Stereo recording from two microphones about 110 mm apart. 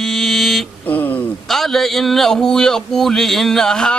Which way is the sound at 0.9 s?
15° left (ahead or behind).